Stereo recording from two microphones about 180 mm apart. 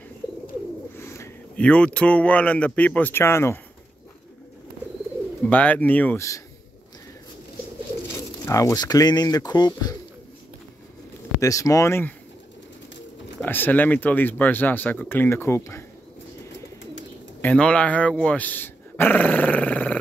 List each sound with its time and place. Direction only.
1.0 s speech: 15° left (ahead or behind)
5.4 s speech: 10° left (ahead or behind)
8.5 s speech: 15° left (ahead or behind)
11.4 s speech: 20° left (ahead or behind)
13.4 s speech: 10° left (ahead or behind)
17.4 s speech: 5° left (ahead or behind)